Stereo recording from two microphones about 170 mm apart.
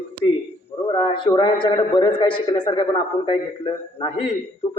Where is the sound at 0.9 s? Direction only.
30° left (ahead or behind).